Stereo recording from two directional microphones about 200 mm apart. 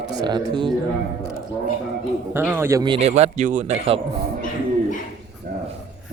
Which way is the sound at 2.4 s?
10° right (ahead or behind).